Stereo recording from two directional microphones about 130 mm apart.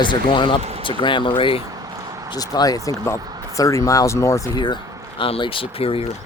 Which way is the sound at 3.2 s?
30° right (ahead or behind).